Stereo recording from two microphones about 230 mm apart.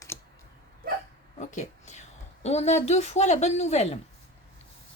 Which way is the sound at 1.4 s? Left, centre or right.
Left.